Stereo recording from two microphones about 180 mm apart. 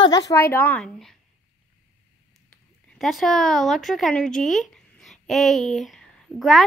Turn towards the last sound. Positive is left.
turn(degrees=0)  # may be behind; listen again after turning